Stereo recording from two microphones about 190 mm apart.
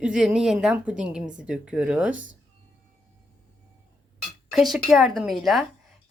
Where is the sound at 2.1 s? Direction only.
85° right.